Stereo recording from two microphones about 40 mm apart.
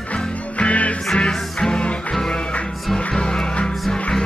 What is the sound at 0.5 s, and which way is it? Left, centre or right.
Music, left.